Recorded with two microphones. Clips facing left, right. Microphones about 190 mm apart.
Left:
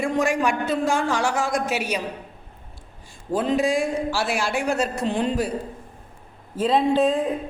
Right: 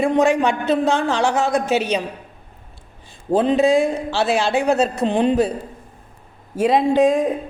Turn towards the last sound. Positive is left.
turn(degrees=-15)  # may be behind; listen again after turning